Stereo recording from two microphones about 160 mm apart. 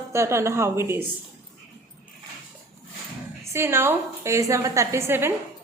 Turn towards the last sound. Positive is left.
turn(degrees=-15)  # may be behind; listen again after turning